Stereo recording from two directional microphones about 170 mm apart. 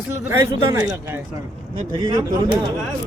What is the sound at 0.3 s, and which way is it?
Speech, 20° right (ahead or behind).